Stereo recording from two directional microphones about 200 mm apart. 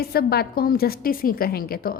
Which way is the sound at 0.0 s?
50° left (ahead or behind).